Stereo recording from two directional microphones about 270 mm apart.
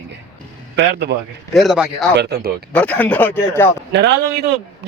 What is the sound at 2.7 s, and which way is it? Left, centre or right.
Speech, centre.